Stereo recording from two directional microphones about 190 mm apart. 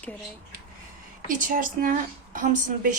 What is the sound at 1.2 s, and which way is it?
A woman's voice, 45° right (ahead or behind).